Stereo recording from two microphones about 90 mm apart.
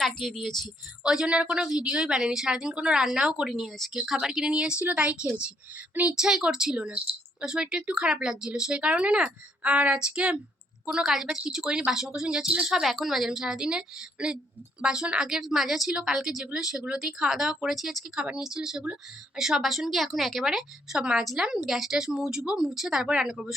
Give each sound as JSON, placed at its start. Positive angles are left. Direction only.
{"t": 0.2, "sound": "a woman's voice", "side_deg": 5}
{"t": 1.0, "sound": "a woman's voice", "side_deg": -10}
{"t": 6.1, "sound": "a woman's voice", "side_deg": -5}